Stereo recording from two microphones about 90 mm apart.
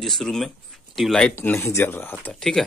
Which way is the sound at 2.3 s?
5° left (ahead or behind).